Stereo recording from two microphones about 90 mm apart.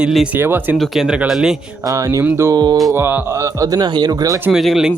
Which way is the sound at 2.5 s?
50° right (ahead or behind).